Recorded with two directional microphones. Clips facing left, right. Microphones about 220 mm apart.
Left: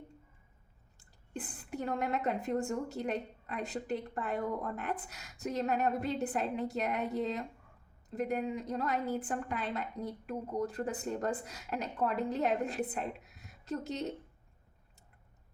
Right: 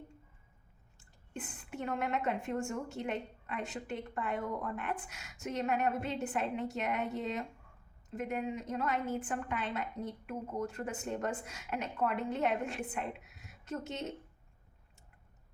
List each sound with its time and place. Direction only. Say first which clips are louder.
0.9 s a woman's voice: left 2 dB; 35° left (ahead or behind)